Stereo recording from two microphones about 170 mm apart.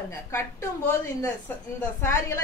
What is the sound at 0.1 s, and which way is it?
A woman's voice, 15° left (ahead or behind).